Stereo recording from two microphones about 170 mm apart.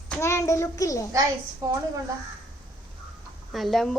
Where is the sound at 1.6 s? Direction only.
20° right (ahead or behind).